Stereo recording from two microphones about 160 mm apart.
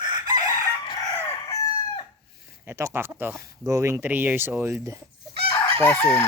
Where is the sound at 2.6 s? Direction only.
15° right (ahead or behind).